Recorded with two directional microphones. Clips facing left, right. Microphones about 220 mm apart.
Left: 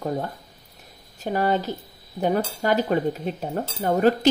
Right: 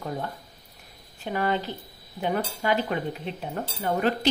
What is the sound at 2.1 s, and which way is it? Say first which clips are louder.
Cutlery: left 5 dB; 40° left (ahead or behind).